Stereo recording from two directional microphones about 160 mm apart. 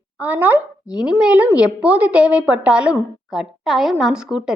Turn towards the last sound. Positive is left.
turn(degrees=-5)  # may be behind; listen again after turning